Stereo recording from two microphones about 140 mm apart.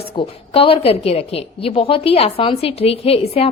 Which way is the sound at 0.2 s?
40° left (ahead or behind).